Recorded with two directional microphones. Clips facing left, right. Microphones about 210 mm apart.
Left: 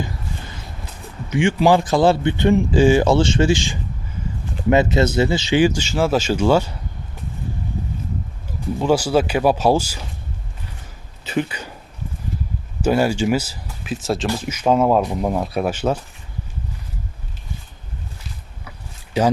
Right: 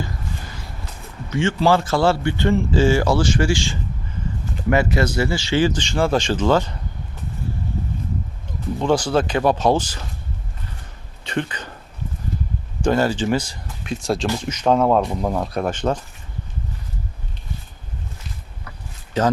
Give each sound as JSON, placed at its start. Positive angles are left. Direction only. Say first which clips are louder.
{"t": 1.3, "sound": "a man's voice", "louder": "left 2 dB", "side_deg": 15}
{"t": 8.8, "sound": "a man's voice", "louder": "left 2 dB", "side_deg": 10}
{"t": 11.2, "sound": "speech", "louder": "left 2 dB", "side_deg": 5}
{"t": 12.8, "sound": "a man's voice", "louder": "left 1 dB", "side_deg": 10}
{"t": 19.2, "sound": "a man's voice", "louder": "left 2 dB", "side_deg": 10}